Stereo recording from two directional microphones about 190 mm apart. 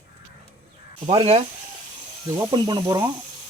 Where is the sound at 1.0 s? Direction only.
35° right (ahead or behind).